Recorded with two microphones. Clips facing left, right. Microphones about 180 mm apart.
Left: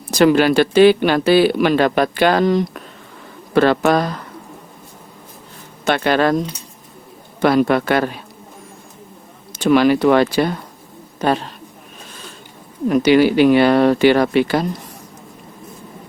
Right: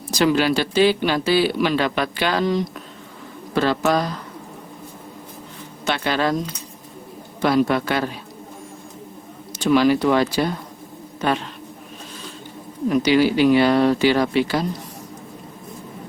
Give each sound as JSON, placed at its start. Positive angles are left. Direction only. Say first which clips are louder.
{"t": 0.1, "sound": "speech", "louder": "left 5 dB", "side_deg": 55}
{"t": 5.8, "sound": "speech", "louder": "left 6 dB", "side_deg": 55}
{"t": 7.4, "sound": "speech", "louder": "left 4 dB", "side_deg": 55}
{"t": 9.5, "sound": "speech", "louder": "left 3 dB", "side_deg": 60}
{"t": 11.2, "sound": "a woman's voice", "louder": "left 4 dB", "side_deg": 40}
{"t": 12.9, "sound": "speech", "louder": "left 4 dB", "side_deg": 55}